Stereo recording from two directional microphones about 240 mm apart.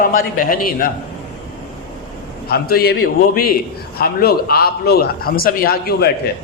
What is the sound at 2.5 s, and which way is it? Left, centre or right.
Speech, left.